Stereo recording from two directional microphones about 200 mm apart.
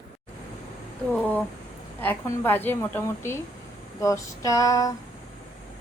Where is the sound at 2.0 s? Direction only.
10° left (ahead or behind).